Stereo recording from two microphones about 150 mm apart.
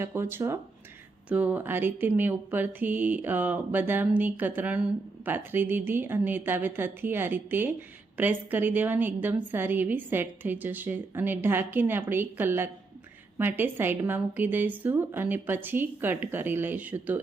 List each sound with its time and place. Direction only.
0.0 s speech: 15° right (ahead or behind)